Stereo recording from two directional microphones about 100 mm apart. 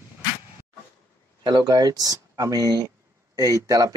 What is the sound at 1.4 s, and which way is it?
Speech, 45° right (ahead or behind).